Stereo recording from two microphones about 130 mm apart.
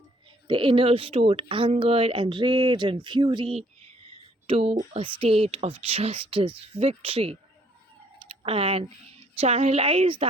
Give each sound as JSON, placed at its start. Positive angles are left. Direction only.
{"t": 0.4, "sound": "a woman's voice", "side_deg": -40}